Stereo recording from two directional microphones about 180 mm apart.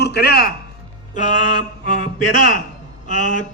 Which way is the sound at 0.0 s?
60° left (ahead or behind).